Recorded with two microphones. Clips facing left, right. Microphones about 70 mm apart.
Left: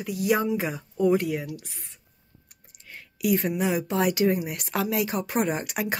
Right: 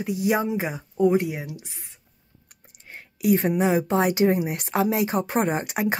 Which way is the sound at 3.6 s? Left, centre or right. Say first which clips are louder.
Right 4 dB; right.